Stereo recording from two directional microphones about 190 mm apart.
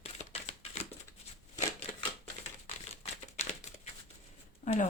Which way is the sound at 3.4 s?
35° left (ahead or behind).